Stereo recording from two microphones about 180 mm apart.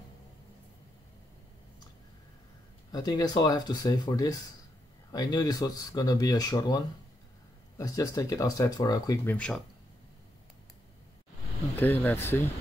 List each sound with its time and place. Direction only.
2.9 s speech: 20° left (ahead or behind)
11.7 s speech: 10° left (ahead or behind)